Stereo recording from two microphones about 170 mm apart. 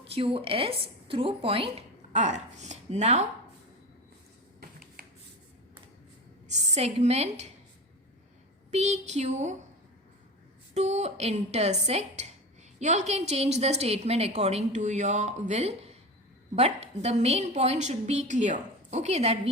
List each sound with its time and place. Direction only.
0.0 s a woman's voice: 35° right (ahead or behind)
2.1 s speech: 45° right (ahead or behind)
4.6 s finger snapping: 60° right (ahead or behind)
6.5 s a woman's voice: 40° right (ahead or behind)
8.7 s a woman's voice: 40° right (ahead or behind)
10.8 s a woman's voice: 40° right (ahead or behind)